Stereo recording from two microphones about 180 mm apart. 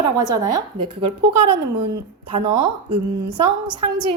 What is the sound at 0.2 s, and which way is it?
A woman's voice, 20° right (ahead or behind).